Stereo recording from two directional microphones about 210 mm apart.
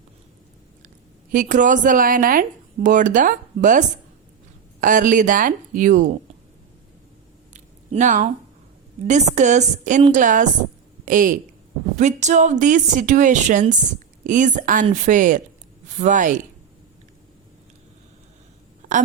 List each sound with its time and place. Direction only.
1.3 s speech: 40° right (ahead or behind)
7.5 s a sound: 35° right (ahead or behind)
9.0 s speech: 35° right (ahead or behind)